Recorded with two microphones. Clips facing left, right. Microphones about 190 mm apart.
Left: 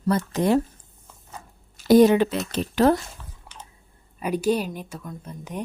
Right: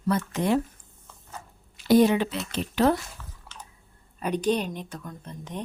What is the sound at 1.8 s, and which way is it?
Speech, 45° left (ahead or behind).